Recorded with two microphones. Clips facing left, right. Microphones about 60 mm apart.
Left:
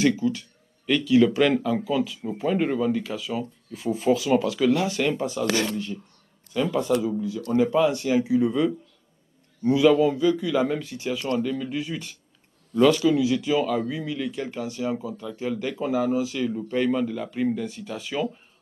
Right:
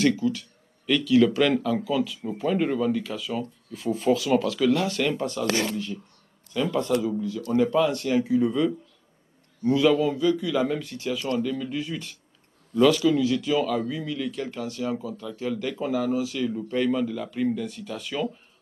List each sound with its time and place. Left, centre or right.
0.0 s speech: centre
6.5 s speech: centre